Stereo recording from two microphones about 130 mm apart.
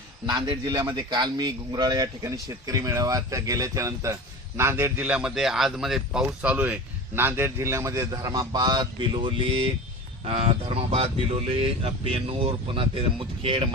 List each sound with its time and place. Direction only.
0.3 s a man's voice: 35° right (ahead or behind)